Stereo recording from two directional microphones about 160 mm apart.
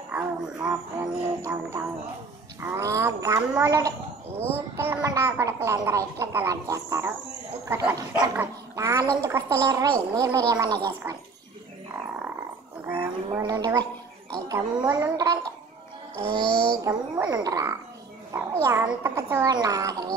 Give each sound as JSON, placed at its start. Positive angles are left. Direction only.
{"t": 0.1, "sound": "music", "side_deg": -15}
{"t": 2.6, "sound": "a child's voice", "side_deg": -15}
{"t": 12.8, "sound": "a sound", "side_deg": -15}
{"t": 13.4, "sound": "speech", "side_deg": -25}
{"t": 16.5, "sound": "speech", "side_deg": 5}
{"t": 16.8, "sound": "a child's voice", "side_deg": -25}